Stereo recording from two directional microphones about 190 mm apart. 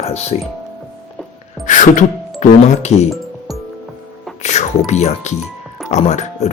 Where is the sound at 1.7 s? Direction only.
40° left (ahead or behind).